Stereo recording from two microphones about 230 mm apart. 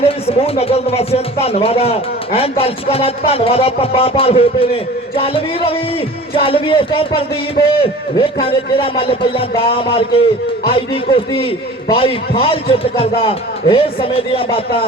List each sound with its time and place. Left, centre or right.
0.0 s speech: left